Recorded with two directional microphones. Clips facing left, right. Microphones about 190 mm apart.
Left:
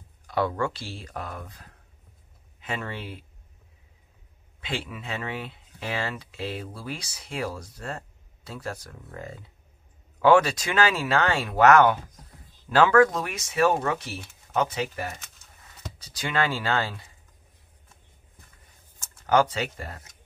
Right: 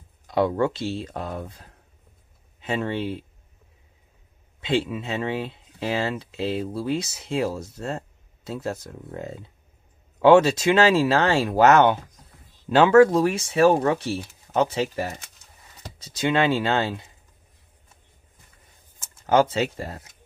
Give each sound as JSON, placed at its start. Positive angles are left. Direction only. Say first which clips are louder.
{"t": 0.3, "sound": "speech", "louder": "right 5 dB", "side_deg": -20}
{"t": 4.6, "sound": "speech", "louder": "right 10 dB", "side_deg": -25}
{"t": 19.2, "sound": "speech", "louder": "right 3 dB", "side_deg": -25}